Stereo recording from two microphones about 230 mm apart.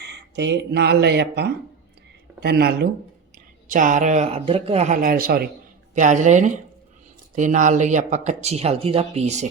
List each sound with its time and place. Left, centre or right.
0.3 s speech: right